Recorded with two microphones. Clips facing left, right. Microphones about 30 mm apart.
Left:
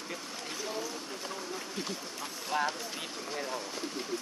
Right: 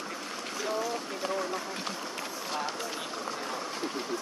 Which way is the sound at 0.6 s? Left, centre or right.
Right.